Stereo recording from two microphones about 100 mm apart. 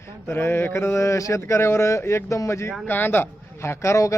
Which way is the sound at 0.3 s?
25° left (ahead or behind).